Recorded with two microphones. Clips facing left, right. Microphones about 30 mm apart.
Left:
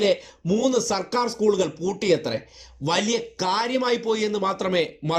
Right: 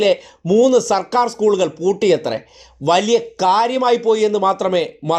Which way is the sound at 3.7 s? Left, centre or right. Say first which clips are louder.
Right 8 dB; centre.